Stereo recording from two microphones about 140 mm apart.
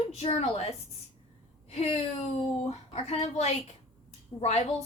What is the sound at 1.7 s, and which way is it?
A woman's voice, 50° left (ahead or behind).